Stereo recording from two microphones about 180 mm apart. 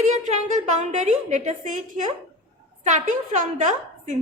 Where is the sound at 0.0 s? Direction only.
40° right (ahead or behind).